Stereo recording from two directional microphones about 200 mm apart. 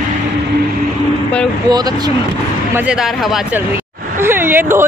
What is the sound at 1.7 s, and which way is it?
Speech, 20° right (ahead or behind).